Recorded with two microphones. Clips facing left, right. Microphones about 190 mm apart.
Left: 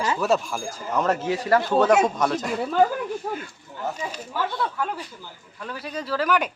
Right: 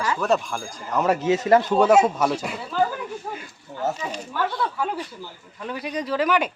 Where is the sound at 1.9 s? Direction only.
5° right (ahead or behind).